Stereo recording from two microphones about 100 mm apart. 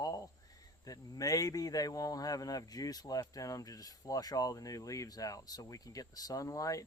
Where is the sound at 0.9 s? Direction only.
35° left (ahead or behind).